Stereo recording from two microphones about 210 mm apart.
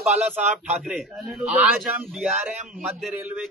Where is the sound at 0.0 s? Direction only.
5° right (ahead or behind).